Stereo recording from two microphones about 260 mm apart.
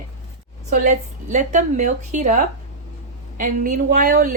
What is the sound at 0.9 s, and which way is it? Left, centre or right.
A woman's voice, right.